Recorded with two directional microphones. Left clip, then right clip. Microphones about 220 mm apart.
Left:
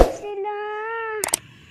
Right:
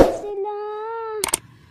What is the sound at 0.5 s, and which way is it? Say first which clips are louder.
Child singing: left 1 dB; 15° right (ahead or behind).